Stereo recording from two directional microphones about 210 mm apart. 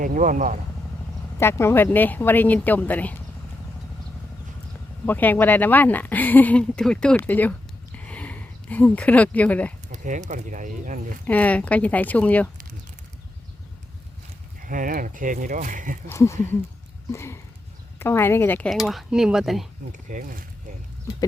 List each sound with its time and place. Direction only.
0.0 s speech: 40° right (ahead or behind)
1.4 s speech: 10° left (ahead or behind)
5.0 s speech: 10° left (ahead or behind)
7.9 s a sound: 5° left (ahead or behind)
9.9 s speech: 35° right (ahead or behind)
11.3 s speech: 5° left (ahead or behind)
14.6 s speech: 40° right (ahead or behind)
16.0 s speech: 15° left (ahead or behind)
19.9 s speech: 35° right (ahead or behind)